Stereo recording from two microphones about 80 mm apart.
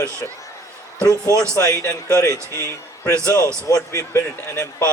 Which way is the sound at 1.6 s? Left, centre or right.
Left.